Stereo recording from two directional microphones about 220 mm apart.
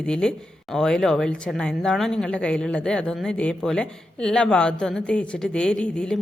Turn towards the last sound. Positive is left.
turn(degrees=5)  # may be behind; listen again after turning